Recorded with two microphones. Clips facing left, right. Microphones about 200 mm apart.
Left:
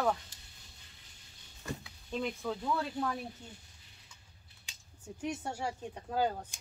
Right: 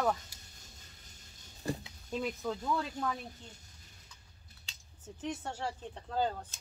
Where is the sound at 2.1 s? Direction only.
5° right (ahead or behind).